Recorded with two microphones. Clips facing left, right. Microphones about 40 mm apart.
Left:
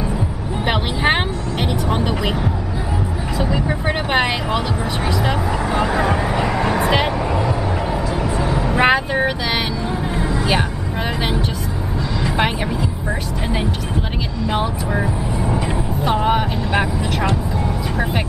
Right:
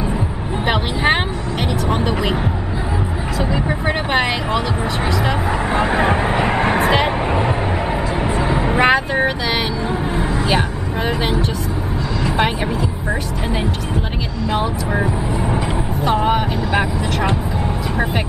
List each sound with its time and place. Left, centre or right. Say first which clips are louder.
0.7 s vehicle: right 1 dB; centre
2.0 s speech: right 1 dB; centre
3.4 s speech: even; centre
3.8 s speech: even; centre
5.7 s speech: right 2 dB; right
8.2 s vehicle: right 2 dB; right
8.7 s speech: even; centre
16.0 s speech: right 1 dB; centre